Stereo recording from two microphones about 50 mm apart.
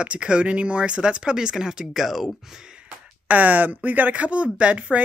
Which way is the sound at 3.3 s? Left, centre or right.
Right.